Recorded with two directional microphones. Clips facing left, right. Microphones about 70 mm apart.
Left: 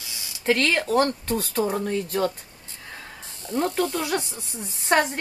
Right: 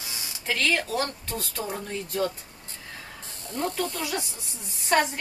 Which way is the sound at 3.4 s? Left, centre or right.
Left.